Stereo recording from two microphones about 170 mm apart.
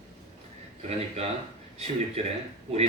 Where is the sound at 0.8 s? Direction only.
40° right (ahead or behind).